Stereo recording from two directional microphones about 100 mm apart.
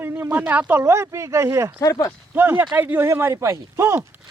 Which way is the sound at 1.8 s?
40° left (ahead or behind).